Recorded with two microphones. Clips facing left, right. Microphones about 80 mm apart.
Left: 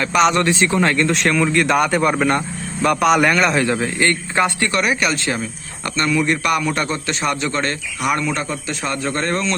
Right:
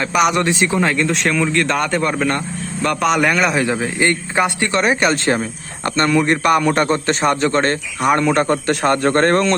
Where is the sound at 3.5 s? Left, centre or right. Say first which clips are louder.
Even; centre; by 8.5 s right.